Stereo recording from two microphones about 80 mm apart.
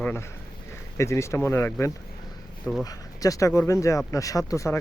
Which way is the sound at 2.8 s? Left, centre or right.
Left.